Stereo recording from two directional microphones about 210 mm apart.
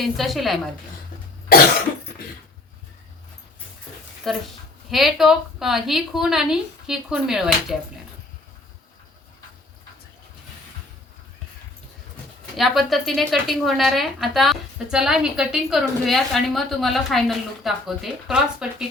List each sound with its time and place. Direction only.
0.0 s a woman's voice: centre (ahead or behind)
1.5 s cough: 45° left (ahead or behind)
4.3 s a woman's voice: centre (ahead or behind)
12.5 s a woman's voice: centre (ahead or behind)